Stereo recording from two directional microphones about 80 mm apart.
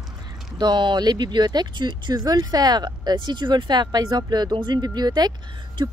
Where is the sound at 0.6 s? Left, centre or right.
Right.